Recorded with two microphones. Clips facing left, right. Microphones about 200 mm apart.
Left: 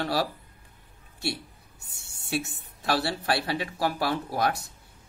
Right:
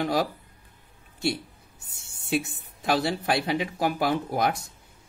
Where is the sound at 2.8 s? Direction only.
20° right (ahead or behind).